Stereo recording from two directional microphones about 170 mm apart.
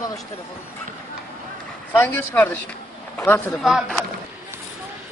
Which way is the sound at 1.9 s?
10° left (ahead or behind).